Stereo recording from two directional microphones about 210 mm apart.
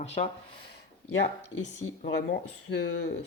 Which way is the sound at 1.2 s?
55° left (ahead or behind).